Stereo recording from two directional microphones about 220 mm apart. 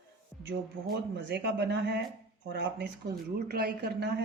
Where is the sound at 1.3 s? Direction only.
50° right (ahead or behind).